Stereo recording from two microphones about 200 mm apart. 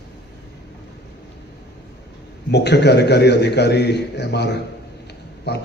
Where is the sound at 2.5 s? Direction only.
55° left (ahead or behind).